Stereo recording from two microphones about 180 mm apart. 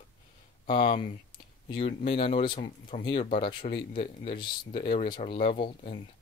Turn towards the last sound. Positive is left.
turn(degrees=30)  # may be behind; listen again after turning